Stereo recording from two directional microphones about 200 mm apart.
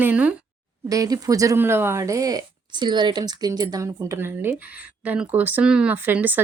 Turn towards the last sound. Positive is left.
turn(degrees=-10)  # may be behind; listen again after turning